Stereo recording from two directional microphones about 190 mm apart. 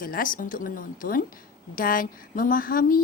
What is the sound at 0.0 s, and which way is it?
A woman's voice, 45° left (ahead or behind).